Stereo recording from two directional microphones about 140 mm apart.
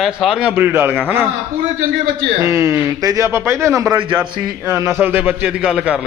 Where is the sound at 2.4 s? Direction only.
20° right (ahead or behind).